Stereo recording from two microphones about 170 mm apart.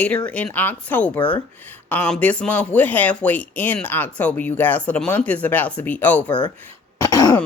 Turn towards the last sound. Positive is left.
turn(degrees=20)  # may be behind; listen again after turning